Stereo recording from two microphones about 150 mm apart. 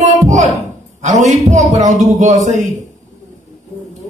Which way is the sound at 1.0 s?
50° right (ahead or behind).